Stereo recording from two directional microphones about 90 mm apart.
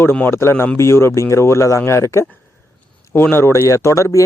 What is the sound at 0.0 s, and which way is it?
A man's voice, 25° left (ahead or behind).